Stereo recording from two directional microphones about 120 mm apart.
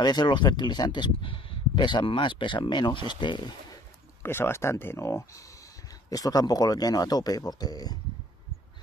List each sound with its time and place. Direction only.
0.0 s speech: 35° left (ahead or behind)
4.2 s speech: 20° left (ahead or behind)